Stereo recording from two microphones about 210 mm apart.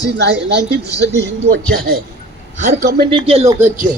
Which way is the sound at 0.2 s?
55° right (ahead or behind).